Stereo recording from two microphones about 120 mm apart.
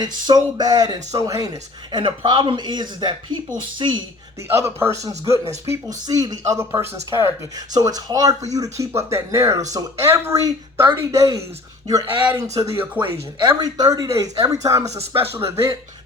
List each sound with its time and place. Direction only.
0.0 s speech: 35° right (ahead or behind)
4.5 s speech: 20° right (ahead or behind)
12.2 s speech: 20° right (ahead or behind)
13.5 s speech: 30° right (ahead or behind)